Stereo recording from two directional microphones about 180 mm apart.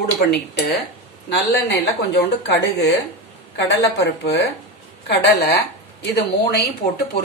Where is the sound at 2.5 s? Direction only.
65° left (ahead or behind).